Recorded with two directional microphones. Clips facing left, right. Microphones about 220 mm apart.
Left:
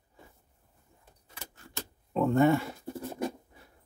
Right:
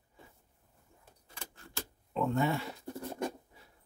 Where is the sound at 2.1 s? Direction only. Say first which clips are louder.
Left 7 dB; 50° left (ahead or behind).